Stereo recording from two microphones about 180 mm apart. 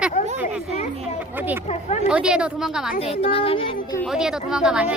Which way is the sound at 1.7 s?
35° left (ahead or behind).